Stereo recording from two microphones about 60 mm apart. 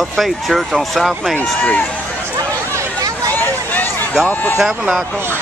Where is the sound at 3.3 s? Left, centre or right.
Left.